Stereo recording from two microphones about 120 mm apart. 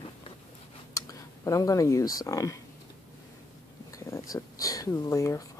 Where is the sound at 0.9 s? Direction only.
25° left (ahead or behind).